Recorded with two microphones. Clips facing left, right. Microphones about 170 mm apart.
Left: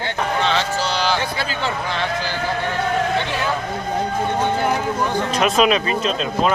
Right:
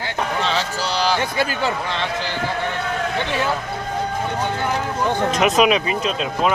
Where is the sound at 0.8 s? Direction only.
40° right (ahead or behind).